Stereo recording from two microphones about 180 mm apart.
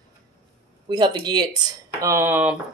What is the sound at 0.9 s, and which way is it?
Speech, 25° right (ahead or behind).